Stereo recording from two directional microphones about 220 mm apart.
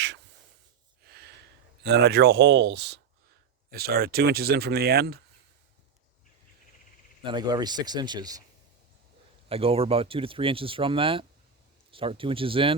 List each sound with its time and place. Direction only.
1.0 s a sound: 45° right (ahead or behind)
1.8 s speech: 50° right (ahead or behind)
7.2 s speech: 20° right (ahead or behind)
9.5 s speech: 25° right (ahead or behind)